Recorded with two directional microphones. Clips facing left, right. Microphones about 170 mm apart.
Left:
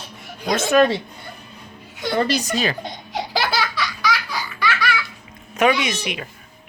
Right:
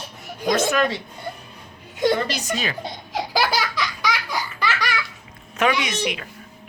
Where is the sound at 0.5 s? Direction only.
25° left (ahead or behind).